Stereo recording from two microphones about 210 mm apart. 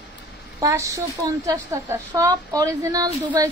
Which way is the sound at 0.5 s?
15° right (ahead or behind).